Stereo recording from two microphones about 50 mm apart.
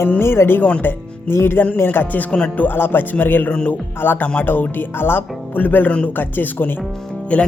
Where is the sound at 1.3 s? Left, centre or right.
Left.